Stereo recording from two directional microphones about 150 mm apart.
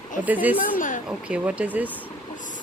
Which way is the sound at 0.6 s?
65° left (ahead or behind).